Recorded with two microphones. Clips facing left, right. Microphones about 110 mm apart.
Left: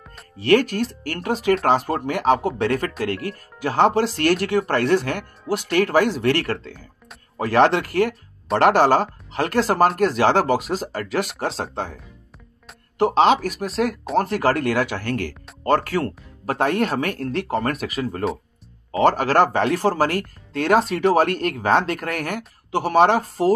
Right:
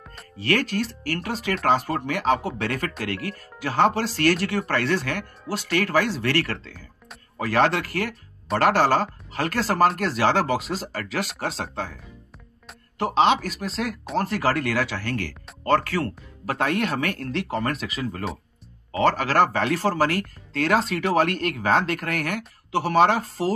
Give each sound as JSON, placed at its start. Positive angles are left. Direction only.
{"t": 1.0, "sound": "speech", "side_deg": 50}
{"t": 11.7, "sound": "speech", "side_deg": 45}
{"t": 13.0, "sound": "speech", "side_deg": 40}